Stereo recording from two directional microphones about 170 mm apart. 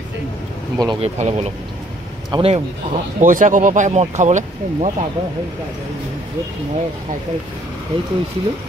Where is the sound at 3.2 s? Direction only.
50° right (ahead or behind).